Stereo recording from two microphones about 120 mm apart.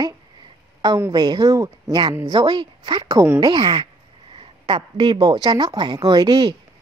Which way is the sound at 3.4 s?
40° right (ahead or behind).